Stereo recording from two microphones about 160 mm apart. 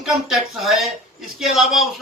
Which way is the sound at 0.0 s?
Centre (ahead or behind).